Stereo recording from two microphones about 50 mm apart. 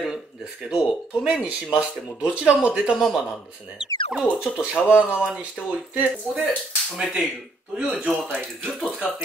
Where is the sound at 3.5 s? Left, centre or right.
Centre.